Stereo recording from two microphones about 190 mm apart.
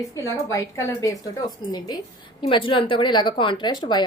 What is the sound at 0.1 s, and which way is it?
A woman's voice, 15° left (ahead or behind).